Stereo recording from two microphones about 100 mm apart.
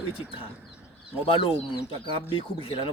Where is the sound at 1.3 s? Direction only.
65° left (ahead or behind).